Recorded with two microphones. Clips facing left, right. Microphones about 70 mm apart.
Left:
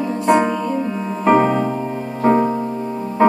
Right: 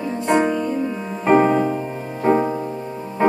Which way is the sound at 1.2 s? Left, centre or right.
Centre.